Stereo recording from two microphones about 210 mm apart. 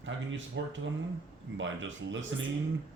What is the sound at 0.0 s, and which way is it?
Speech, 65° right (ahead or behind).